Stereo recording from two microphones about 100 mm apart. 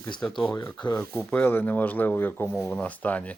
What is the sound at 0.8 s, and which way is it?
Speech, 45° left (ahead or behind).